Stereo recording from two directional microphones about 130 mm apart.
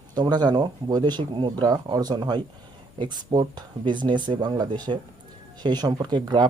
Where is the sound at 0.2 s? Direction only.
35° right (ahead or behind).